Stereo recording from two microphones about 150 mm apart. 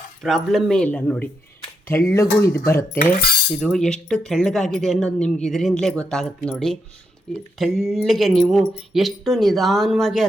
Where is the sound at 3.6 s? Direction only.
5° left (ahead or behind).